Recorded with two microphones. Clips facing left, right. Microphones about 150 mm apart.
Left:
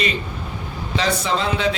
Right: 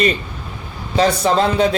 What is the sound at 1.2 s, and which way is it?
Speech, 45° right (ahead or behind).